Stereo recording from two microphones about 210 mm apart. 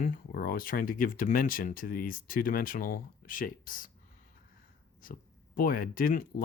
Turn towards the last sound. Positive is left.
turn(degrees=45)  # may be behind; listen again after turning